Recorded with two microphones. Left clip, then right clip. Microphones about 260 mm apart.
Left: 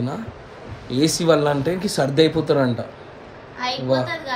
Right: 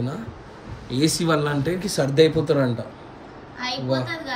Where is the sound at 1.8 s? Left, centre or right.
Centre.